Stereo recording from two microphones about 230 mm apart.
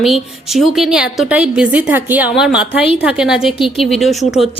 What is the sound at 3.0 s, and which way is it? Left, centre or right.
A woman's voice, centre.